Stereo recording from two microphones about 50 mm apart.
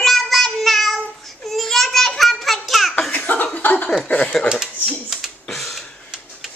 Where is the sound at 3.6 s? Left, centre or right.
Left.